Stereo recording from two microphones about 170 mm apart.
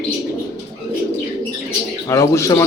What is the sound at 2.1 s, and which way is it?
Speech, 20° left (ahead or behind).